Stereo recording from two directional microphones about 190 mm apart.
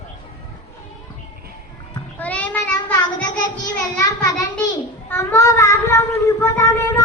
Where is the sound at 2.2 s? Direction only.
10° left (ahead or behind).